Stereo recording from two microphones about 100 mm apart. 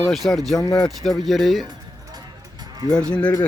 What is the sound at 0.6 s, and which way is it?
Speech, 35° left (ahead or behind).